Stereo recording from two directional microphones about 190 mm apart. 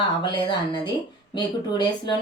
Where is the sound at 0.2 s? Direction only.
25° left (ahead or behind).